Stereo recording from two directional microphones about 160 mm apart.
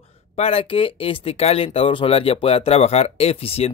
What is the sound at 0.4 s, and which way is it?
Speech, 40° left (ahead or behind).